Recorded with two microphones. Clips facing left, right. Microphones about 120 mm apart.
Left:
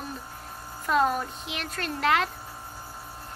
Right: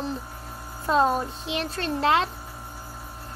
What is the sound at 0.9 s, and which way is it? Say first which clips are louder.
Speech: right 3 dB; 30° right (ahead or behind).